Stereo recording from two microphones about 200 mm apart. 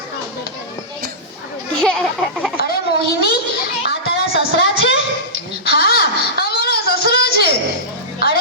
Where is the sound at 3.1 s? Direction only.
50° left (ahead or behind).